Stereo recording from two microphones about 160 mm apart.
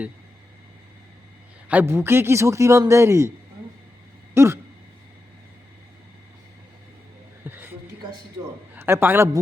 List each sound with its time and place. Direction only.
1.6 s a man's voice: 10° right (ahead or behind)
4.4 s a man's voice: 15° right (ahead or behind)
7.4 s a sound: 10° right (ahead or behind)
8.7 s a man's voice: 15° right (ahead or behind)